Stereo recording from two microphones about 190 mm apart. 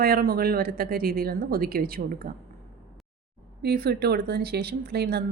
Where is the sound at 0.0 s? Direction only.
50° right (ahead or behind).